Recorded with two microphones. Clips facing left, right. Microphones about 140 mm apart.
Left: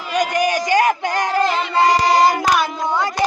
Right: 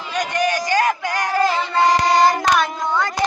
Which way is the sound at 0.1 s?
10° left (ahead or behind).